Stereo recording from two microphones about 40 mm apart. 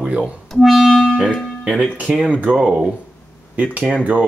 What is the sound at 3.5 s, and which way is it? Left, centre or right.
Speech, right.